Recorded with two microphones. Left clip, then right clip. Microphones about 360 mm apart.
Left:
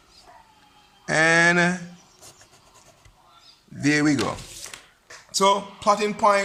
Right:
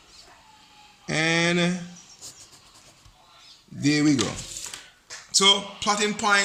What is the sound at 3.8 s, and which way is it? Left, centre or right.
Speech, left.